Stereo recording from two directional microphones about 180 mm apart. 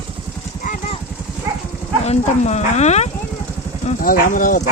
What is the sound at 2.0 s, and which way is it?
Speech, 40° left (ahead or behind).